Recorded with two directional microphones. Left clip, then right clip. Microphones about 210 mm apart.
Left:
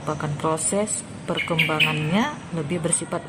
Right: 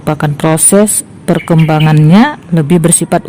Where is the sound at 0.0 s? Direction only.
50° right (ahead or behind).